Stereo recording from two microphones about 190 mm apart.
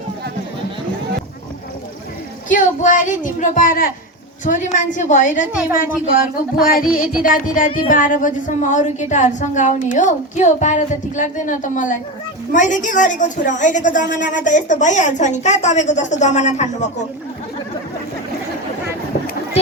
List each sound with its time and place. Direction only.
2.5 s a woman's voice: 45° left (ahead or behind)